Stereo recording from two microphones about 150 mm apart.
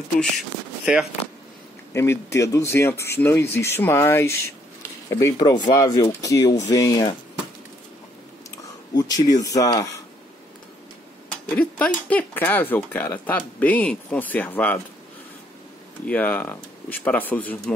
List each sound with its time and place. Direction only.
0.9 s speech: 5° right (ahead or behind)
2.0 s speech: 15° left (ahead or behind)
8.5 s speech: 25° left (ahead or behind)
11.4 s speech: 10° left (ahead or behind)
16.1 s speech: 10° left (ahead or behind)